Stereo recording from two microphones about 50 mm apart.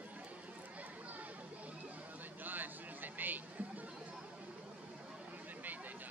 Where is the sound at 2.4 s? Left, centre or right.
Right.